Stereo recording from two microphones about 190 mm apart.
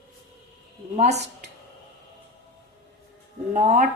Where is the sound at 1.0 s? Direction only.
35° right (ahead or behind).